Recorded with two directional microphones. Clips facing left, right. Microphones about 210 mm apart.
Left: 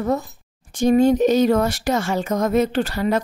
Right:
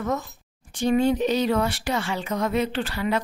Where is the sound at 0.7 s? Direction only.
45° left (ahead or behind).